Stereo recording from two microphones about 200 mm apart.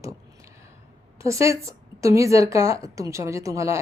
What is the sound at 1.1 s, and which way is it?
Speech, 15° right (ahead or behind).